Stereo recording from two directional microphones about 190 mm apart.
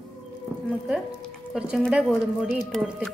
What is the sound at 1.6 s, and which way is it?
A woman's voice, 5° right (ahead or behind).